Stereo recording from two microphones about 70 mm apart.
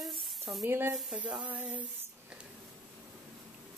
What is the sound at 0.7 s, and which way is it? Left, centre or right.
Speech, right.